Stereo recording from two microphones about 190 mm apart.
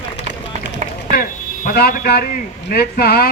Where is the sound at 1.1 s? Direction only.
50° left (ahead or behind).